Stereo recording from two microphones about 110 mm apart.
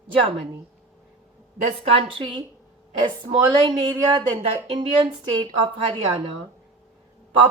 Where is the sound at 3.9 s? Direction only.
35° right (ahead or behind).